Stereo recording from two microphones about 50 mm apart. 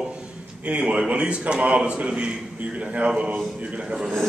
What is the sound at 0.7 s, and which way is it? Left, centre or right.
A man's voice, right.